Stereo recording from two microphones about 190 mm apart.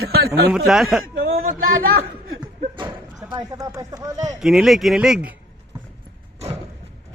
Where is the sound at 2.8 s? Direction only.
25° right (ahead or behind).